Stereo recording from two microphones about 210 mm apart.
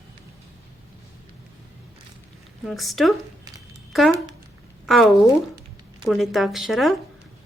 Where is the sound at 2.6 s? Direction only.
Centre (ahead or behind).